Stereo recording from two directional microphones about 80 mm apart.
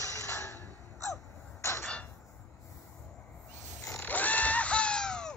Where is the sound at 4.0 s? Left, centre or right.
Left.